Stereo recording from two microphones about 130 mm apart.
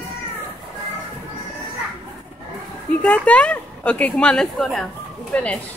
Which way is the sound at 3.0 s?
10° left (ahead or behind).